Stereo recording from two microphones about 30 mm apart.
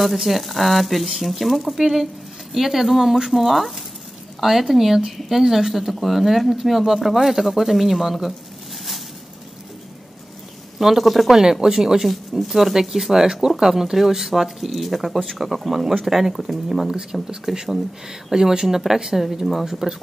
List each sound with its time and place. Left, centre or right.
0.0 s speech: centre
10.8 s speech: centre
12.4 s speech: centre
12.7 s speech: centre
16.9 s speech: right
17.5 s speech: centre